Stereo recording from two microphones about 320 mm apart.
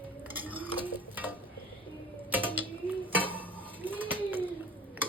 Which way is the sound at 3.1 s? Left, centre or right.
Centre.